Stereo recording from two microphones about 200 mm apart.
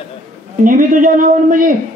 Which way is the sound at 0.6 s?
40° right (ahead or behind).